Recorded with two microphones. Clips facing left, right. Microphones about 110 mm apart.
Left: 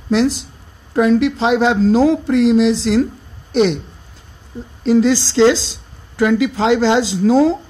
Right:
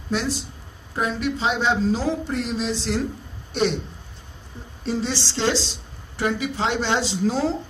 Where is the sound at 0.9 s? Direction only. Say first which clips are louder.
Left 11 dB; 75° left (ahead or behind); by 3.8 s 90° left.